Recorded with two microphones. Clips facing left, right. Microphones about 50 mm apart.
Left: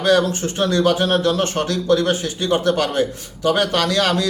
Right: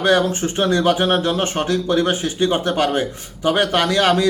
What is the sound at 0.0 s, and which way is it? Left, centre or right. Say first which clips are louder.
A man's voice: even; right.